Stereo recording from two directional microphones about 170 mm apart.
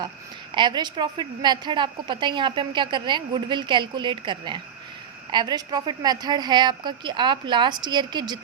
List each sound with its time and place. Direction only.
0.5 s a woman's voice: 25° right (ahead or behind)